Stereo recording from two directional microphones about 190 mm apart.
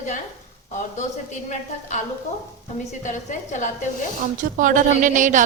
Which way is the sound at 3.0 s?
40° left (ahead or behind).